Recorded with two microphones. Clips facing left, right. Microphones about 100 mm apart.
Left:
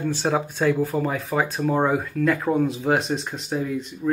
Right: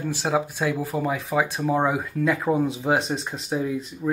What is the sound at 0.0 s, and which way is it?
Speech, 5° right (ahead or behind).